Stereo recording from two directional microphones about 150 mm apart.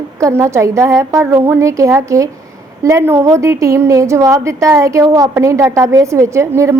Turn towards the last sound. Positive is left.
turn(degrees=-20)  # may be behind; listen again after turning